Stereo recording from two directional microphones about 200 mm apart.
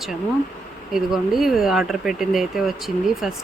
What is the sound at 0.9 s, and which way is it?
Speech, centre (ahead or behind).